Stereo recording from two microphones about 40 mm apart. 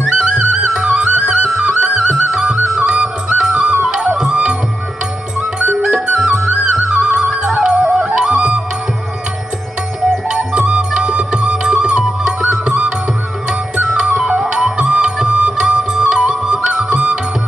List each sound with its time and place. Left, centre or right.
0.0 s music: right
5.6 s music: right
10.3 s music: right
14.1 s music: centre